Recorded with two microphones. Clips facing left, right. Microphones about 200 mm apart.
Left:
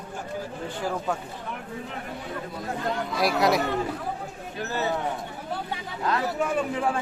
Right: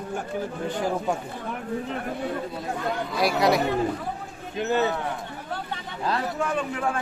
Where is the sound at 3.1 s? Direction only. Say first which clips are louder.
Right 1 dB; centre (ahead or behind).